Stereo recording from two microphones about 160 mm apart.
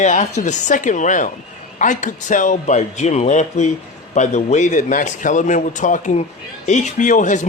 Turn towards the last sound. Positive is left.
turn(degrees=50)  # may be behind; listen again after turning